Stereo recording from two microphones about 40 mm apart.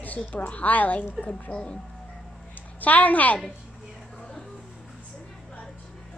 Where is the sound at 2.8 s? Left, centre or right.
Left.